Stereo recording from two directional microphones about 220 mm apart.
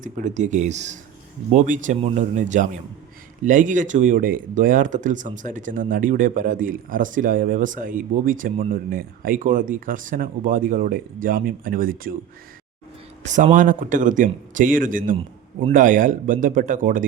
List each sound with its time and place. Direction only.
0.0 s speech: 35° right (ahead or behind)
13.2 s speech: 35° right (ahead or behind)